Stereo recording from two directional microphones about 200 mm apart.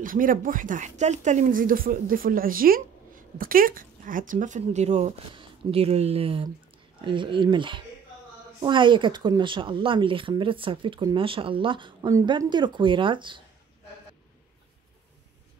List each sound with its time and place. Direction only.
0.0 s speech: 45° right (ahead or behind); by 13.4 s 25° right (ahead or behind)